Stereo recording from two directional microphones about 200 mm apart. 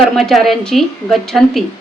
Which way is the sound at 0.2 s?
Centre (ahead or behind).